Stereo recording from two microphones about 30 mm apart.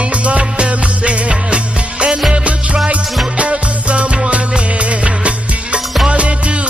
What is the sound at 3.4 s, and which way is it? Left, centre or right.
Music, right.